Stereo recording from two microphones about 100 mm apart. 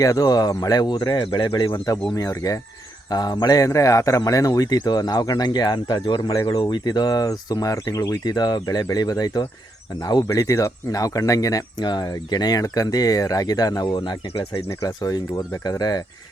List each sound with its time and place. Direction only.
0.0 s speech: 35° left (ahead or behind)
2.1 s speech: 35° left (ahead or behind)
3.1 s speech: 45° left (ahead or behind)
6.3 s speech: 30° left (ahead or behind)
6.6 s speech: 50° left (ahead or behind)
10.3 s speech: 30° left (ahead or behind); by 14.2 s 45° left (ahead or behind)
14.7 s speech: 35° left (ahead or behind)